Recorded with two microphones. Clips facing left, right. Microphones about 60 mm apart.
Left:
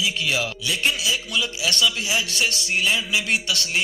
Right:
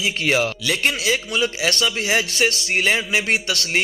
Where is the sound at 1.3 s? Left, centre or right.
Right.